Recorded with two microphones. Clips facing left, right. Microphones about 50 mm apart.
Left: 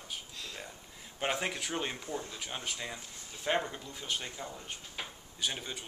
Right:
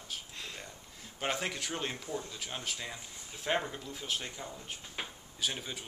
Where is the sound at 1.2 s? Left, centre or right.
Centre.